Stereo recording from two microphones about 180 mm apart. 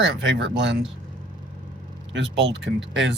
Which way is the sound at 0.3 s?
80° right.